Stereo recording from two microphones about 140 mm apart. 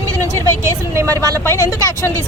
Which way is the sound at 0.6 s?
20° right (ahead or behind).